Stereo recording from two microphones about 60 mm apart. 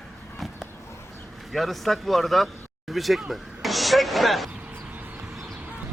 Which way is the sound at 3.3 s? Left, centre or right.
Centre.